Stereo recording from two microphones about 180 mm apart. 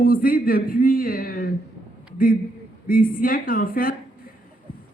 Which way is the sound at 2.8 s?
50° left (ahead or behind).